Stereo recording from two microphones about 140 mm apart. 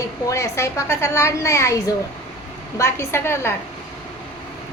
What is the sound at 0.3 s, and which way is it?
A woman's voice, 20° left (ahead or behind).